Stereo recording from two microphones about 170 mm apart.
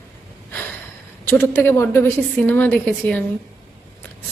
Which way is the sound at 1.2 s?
15° left (ahead or behind).